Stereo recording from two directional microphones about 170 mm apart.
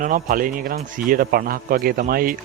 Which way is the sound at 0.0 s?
55° right (ahead or behind).